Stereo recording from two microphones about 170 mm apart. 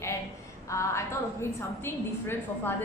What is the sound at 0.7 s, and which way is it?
A woman's voice, 15° left (ahead or behind).